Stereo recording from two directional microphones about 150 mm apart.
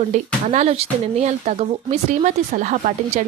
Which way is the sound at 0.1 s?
50° right (ahead or behind).